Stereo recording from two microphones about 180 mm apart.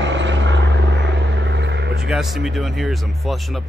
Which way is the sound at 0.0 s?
85° right.